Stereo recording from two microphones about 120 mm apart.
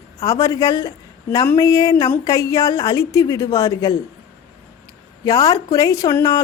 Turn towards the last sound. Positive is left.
turn(degrees=30)  # may be behind; listen again after turning